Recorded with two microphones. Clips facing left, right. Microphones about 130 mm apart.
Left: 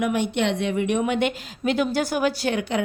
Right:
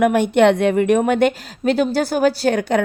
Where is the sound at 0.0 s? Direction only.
50° right (ahead or behind).